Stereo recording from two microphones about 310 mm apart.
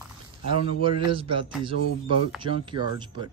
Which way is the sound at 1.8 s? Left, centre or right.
Left.